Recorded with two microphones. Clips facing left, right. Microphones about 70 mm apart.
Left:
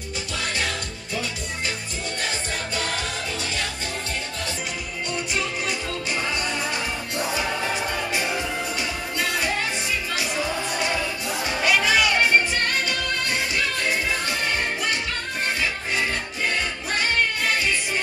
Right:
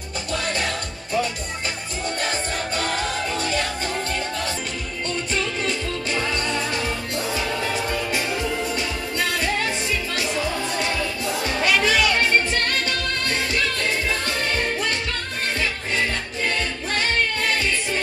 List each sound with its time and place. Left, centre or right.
11.4 s music: left